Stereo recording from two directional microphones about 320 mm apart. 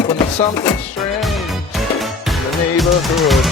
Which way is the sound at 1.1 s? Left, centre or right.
Centre.